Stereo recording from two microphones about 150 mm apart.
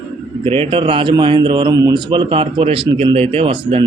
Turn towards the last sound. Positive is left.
turn(degrees=-40)  # may be behind; listen again after turning